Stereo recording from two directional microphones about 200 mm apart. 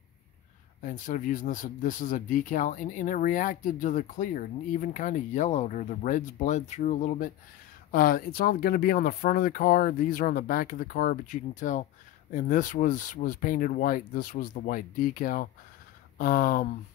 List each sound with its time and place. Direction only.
0.8 s speech: 40° left (ahead or behind)